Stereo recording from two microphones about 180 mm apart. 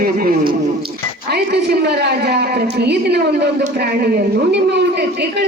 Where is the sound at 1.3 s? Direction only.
65° right (ahead or behind).